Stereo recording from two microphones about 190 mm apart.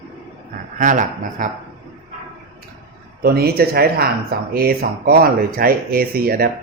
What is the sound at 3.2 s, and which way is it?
Speech, 55° right (ahead or behind).